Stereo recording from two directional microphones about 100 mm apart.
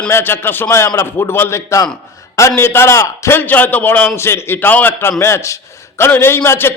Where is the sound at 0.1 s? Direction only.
20° left (ahead or behind).